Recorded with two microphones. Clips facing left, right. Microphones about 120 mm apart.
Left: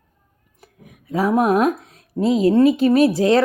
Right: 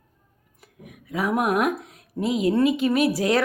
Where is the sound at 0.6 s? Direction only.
30° left (ahead or behind).